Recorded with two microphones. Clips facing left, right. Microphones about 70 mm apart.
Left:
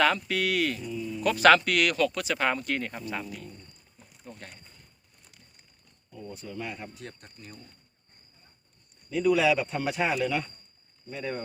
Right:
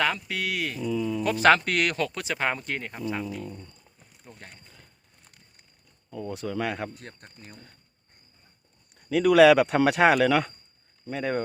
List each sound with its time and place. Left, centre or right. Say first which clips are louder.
0.0 s speech: left 3 dB; centre
1.2 s speech: left 1 dB; right
4.3 s speech: left 2 dB; centre
6.1 s speech: right 8 dB; right
7.2 s speech: right 2 dB; right
9.0 s speech: right 7 dB; right
11.1 s speech: right 6 dB; right